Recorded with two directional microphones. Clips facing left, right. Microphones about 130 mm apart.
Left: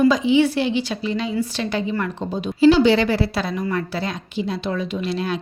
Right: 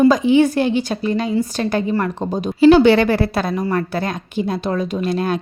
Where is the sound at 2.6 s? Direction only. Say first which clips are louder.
Right 4 dB; 55° right (ahead or behind).